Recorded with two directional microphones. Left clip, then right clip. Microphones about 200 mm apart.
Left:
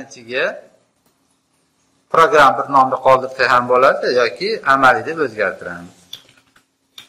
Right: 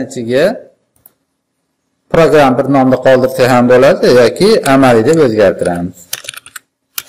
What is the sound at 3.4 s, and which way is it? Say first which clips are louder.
A man's voice: right 5 dB; 45° right (ahead or behind).